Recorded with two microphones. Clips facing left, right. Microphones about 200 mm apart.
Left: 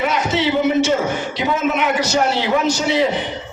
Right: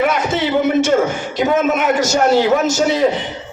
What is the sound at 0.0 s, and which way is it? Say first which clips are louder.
A man's voice: right 2 dB; 50° right (ahead or behind).